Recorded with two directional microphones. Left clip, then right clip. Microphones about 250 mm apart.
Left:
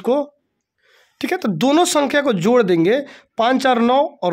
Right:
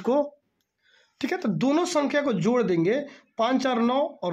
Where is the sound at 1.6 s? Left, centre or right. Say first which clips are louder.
Left 9 dB; left.